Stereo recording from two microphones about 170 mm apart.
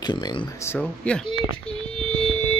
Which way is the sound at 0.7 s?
10° left (ahead or behind).